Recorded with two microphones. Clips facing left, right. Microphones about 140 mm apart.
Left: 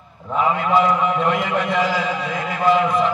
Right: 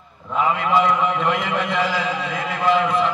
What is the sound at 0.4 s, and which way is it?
A man's voice, centre (ahead or behind).